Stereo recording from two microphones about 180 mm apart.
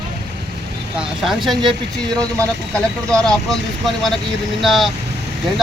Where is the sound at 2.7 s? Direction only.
5° left (ahead or behind).